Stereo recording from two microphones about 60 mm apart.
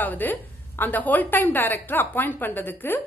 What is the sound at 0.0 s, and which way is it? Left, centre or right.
A woman's voice, left.